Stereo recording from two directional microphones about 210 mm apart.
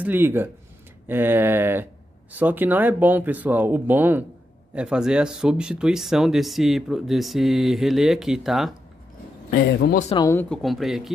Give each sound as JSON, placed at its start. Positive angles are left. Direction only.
{"t": 0.0, "sound": "speech", "side_deg": -10}
{"t": 10.1, "sound": "speech", "side_deg": 15}
{"t": 10.5, "sound": "speech", "side_deg": 0}